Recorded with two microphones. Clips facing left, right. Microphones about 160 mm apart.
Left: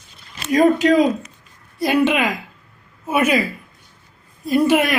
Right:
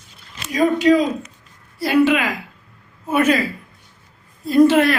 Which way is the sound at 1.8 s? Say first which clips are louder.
Right 1 dB; 20° left (ahead or behind).